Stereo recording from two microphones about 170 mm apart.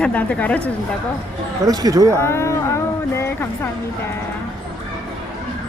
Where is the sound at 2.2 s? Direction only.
15° left (ahead or behind).